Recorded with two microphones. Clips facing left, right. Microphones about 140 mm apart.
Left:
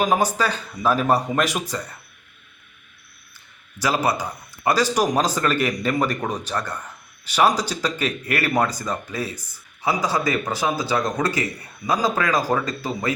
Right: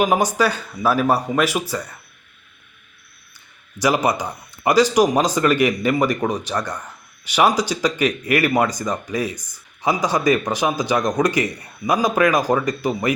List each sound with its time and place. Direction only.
0.0 s speech: 15° right (ahead or behind)
3.8 s speech: 15° right (ahead or behind)